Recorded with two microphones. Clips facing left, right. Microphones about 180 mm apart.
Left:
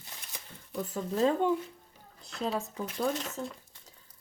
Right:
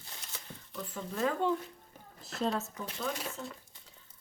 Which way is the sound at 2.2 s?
Centre (ahead or behind).